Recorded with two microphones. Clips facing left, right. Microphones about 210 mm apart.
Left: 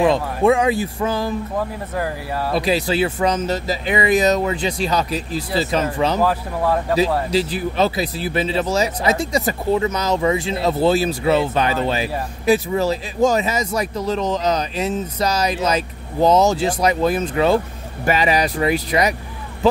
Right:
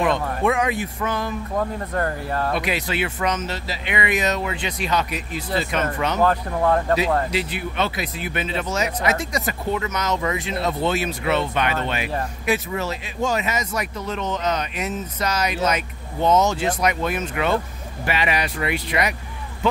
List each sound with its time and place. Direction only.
0.0 s speech: 30° left (ahead or behind)
1.6 s speech: 5° left (ahead or behind)
2.5 s speech: 35° left (ahead or behind)
6.2 s speech: 5° left (ahead or behind)
7.2 s speech: 35° left (ahead or behind)